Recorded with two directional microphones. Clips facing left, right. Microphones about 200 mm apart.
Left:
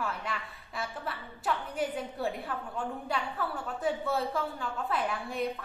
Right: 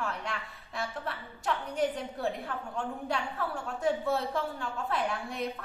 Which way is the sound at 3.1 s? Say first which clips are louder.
Even; 5° left (ahead or behind).